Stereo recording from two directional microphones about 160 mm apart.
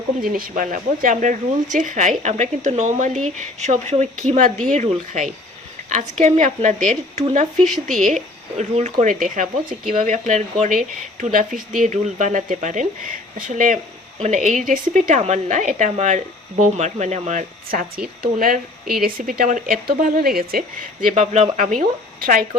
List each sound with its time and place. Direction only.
0.2 s a woman's voice: 60° right (ahead or behind); by 17.4 s 45° right (ahead or behind)
17.7 s a woman's voice: 65° right (ahead or behind)